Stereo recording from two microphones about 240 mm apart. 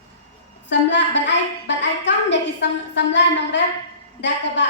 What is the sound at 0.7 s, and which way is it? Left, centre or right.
Speech, left.